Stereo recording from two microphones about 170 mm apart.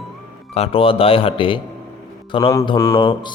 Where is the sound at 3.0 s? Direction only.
30° left (ahead or behind).